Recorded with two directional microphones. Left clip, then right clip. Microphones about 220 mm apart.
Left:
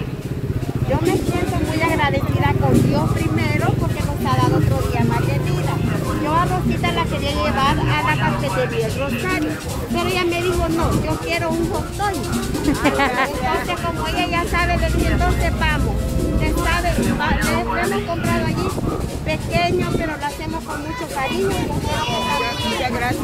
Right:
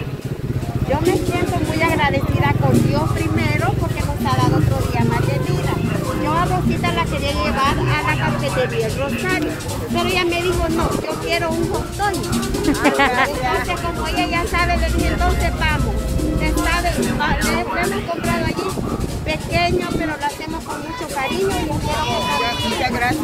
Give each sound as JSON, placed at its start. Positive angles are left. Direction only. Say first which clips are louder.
{"t": 1.8, "sound": "vehicle", "louder": "right 1 dB", "side_deg": 5}
{"t": 4.3, "sound": "music", "louder": "even", "side_deg": 15}
{"t": 6.2, "sound": "vehicle", "louder": "even", "side_deg": 20}
{"t": 9.9, "sound": "speech", "louder": "right 1 dB", "side_deg": 10}
{"t": 12.8, "sound": "speech", "louder": "right 3 dB", "side_deg": 0}
{"t": 14.1, "sound": "speech", "louder": "right 1 dB", "side_deg": 20}
{"t": 22.8, "sound": "speech", "louder": "right 5 dB", "side_deg": -15}